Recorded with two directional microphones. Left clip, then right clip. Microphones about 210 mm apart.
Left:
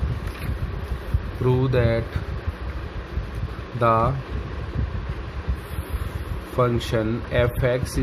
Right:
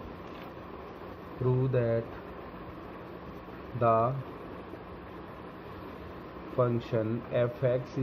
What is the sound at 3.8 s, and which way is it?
Speech, 50° left (ahead or behind).